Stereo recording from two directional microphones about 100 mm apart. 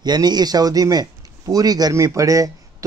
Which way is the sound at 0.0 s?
45° right (ahead or behind).